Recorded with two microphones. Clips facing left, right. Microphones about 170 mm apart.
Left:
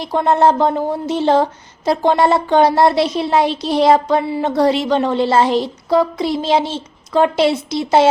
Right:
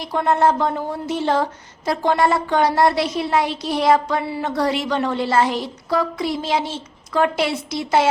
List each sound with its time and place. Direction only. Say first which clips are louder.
0.0 s speech: left 4 dB; 25° left (ahead or behind)